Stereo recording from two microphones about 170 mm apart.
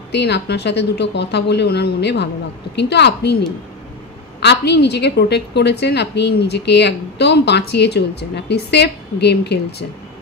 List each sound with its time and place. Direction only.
0.1 s a woman's voice: 85° left
4.4 s a woman's voice: 80° left